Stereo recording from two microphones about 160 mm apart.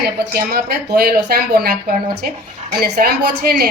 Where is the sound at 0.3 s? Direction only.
70° right (ahead or behind).